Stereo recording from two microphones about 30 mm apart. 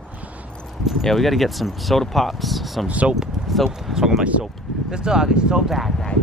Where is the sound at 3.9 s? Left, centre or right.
Centre.